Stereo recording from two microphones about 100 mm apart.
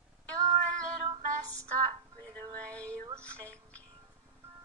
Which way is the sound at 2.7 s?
15° left (ahead or behind).